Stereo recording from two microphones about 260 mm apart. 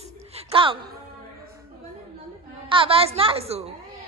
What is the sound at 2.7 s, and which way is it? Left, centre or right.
Speech, right.